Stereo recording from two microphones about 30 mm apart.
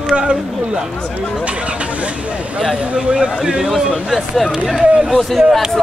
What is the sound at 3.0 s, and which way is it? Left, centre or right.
Speech, right.